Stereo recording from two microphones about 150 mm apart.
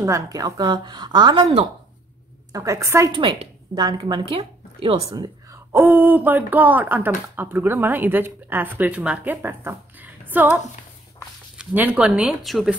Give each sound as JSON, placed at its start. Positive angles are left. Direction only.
{"t": 0.0, "sound": "a woman's voice", "side_deg": -20}
{"t": 2.5, "sound": "a woman's voice", "side_deg": -20}
{"t": 3.1, "sound": "a woman's voice", "side_deg": -35}
{"t": 5.1, "sound": "speech", "side_deg": -25}